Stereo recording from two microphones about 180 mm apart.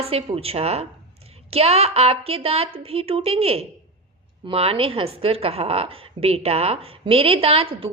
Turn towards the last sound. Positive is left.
turn(degrees=-30)  # may be behind; listen again after turning